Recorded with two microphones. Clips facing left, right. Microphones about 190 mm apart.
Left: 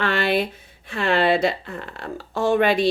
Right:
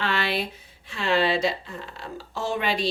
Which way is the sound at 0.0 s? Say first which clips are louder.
Left 6 dB; 50° left (ahead or behind).